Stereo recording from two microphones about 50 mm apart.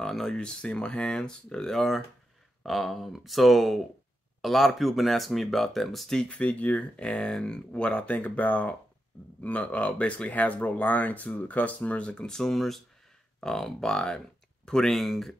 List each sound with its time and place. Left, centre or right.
0.0 s speech: centre
6.1 s speech: left
7.0 s speech: centre